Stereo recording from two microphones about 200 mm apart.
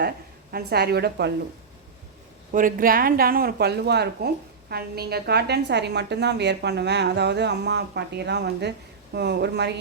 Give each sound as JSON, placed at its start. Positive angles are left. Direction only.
{"t": 0.5, "sound": "a woman's voice", "side_deg": -50}
{"t": 2.5, "sound": "a woman's voice", "side_deg": -45}